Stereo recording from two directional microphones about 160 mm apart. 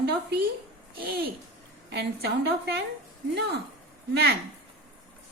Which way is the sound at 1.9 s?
90° right.